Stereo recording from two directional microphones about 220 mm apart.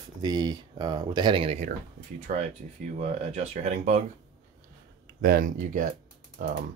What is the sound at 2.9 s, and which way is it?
Speech, 30° right (ahead or behind).